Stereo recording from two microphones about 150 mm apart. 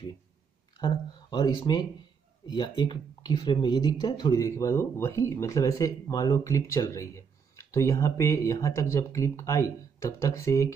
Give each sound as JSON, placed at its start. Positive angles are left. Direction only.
{"t": 0.7, "sound": "speech", "side_deg": 30}